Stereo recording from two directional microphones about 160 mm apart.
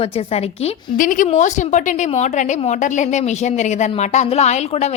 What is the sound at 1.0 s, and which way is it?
A woman's voice, 55° left (ahead or behind).